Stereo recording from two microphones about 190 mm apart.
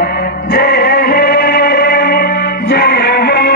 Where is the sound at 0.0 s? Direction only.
55° left (ahead or behind).